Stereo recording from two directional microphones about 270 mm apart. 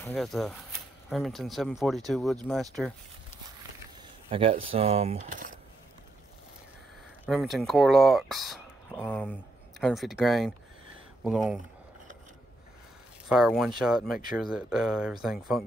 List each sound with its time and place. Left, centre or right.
0.0 s speech: centre
4.3 s speech: centre
7.2 s speech: centre
13.3 s speech: centre